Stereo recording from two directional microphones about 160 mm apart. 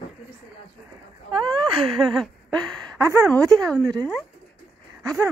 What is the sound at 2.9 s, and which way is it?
Speech, 20° right (ahead or behind).